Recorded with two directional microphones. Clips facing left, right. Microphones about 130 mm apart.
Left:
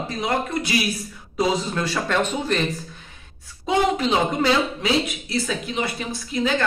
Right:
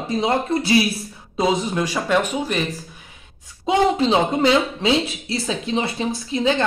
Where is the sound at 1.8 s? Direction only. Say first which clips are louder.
Right 3 dB; 15° right (ahead or behind).